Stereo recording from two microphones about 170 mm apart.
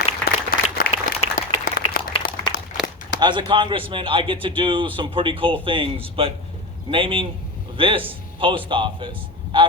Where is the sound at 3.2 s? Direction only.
30° right (ahead or behind).